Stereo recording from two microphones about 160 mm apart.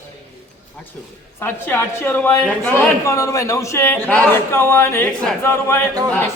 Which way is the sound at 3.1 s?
20° left (ahead or behind).